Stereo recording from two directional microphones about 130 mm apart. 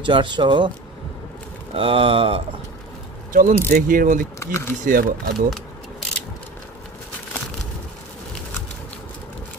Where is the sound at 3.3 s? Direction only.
85° right.